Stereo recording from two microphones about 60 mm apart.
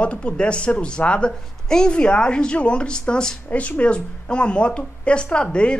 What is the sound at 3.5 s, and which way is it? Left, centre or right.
A woman's voice, left.